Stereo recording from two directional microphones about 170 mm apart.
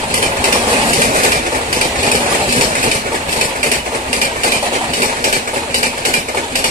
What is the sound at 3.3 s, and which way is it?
Train, 50° right (ahead or behind).